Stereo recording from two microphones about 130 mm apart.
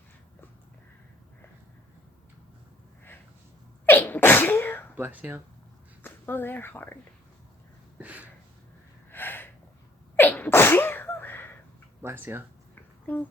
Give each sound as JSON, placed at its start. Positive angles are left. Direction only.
{"t": 3.8, "sound": "sneeze", "side_deg": 15}
{"t": 4.9, "sound": "speech", "side_deg": -15}
{"t": 6.0, "sound": "a woman's voice", "side_deg": 15}
{"t": 7.9, "sound": "speech", "side_deg": -10}
{"t": 9.0, "sound": "a sound", "side_deg": 15}
{"t": 10.2, "sound": "sneeze", "side_deg": 15}
{"t": 12.0, "sound": "speech", "side_deg": -15}
{"t": 12.7, "sound": "a sound", "side_deg": 15}